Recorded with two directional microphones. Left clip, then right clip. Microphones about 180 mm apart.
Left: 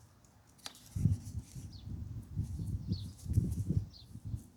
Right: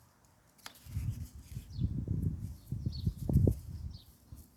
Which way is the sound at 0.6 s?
15° left (ahead or behind).